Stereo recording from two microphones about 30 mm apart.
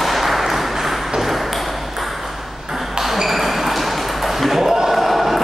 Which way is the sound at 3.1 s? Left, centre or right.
Centre.